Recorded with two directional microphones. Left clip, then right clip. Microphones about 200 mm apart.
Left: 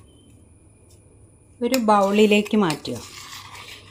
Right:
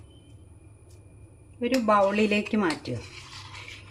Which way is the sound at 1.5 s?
30° left (ahead or behind).